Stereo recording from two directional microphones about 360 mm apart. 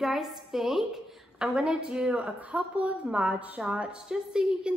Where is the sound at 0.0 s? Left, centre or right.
Centre.